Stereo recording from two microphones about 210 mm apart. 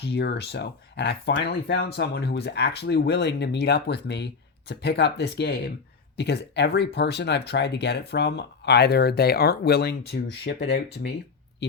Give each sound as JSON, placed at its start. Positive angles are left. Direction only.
{"t": 0.0, "sound": "speech", "side_deg": 50}